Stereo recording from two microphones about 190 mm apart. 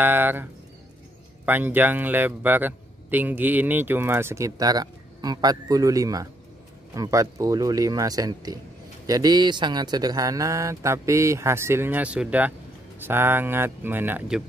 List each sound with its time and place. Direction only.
0.0 s a man's voice: 10° right (ahead or behind)